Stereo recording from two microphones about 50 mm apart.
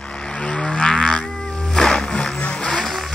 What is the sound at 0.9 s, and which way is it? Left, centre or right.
Music, centre.